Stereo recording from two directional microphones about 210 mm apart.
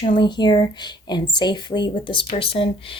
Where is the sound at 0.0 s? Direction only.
20° left (ahead or behind).